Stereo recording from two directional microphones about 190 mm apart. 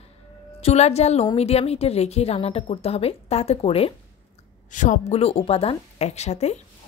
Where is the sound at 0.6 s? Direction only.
35° left (ahead or behind).